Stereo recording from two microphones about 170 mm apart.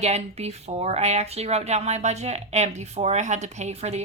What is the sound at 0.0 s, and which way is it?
Speech, 40° right (ahead or behind).